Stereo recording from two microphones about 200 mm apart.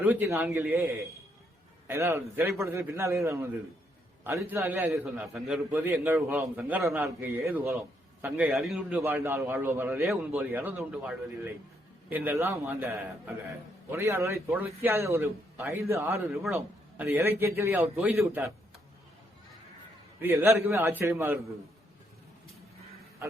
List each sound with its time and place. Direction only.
0.0 s a man's voice: 10° right (ahead or behind)
1.9 s a man's voice: 15° right (ahead or behind)
9.0 s a man's voice: 10° right (ahead or behind)
20.2 s a man's voice: 10° right (ahead or behind)